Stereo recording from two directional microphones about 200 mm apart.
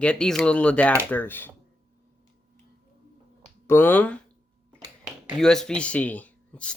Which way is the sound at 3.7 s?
10° left (ahead or behind).